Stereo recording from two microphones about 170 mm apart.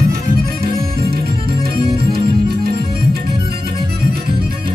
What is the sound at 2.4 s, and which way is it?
Music, 65° right (ahead or behind).